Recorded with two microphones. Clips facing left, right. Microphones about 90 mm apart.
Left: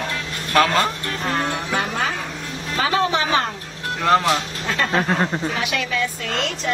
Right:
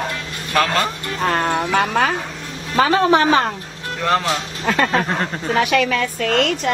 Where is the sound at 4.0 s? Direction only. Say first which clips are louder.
Left 2 dB; centre (ahead or behind).